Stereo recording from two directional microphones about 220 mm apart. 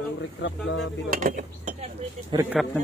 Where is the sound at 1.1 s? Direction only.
35° right (ahead or behind).